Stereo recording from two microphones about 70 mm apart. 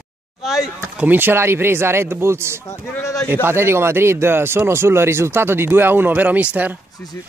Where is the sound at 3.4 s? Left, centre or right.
Right.